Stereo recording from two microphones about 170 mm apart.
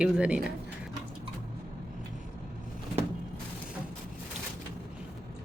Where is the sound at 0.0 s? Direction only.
5° right (ahead or behind).